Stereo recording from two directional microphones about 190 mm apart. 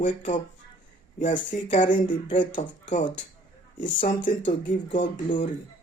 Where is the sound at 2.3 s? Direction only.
40° left (ahead or behind).